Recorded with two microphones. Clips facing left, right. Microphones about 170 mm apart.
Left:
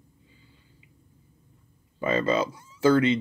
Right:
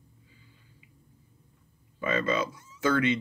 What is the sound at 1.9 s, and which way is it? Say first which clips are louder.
Speech: left 4 dB; 30° left (ahead or behind).